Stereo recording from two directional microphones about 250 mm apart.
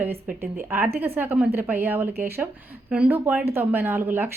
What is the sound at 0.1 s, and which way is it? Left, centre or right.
Speech, right.